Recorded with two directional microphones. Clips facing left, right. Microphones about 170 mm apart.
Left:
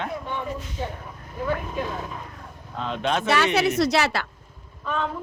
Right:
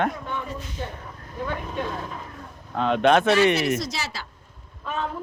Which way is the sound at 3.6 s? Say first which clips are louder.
Left 5 dB; 65° left (ahead or behind).